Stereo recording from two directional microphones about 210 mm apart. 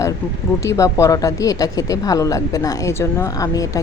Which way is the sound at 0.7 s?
15° left (ahead or behind).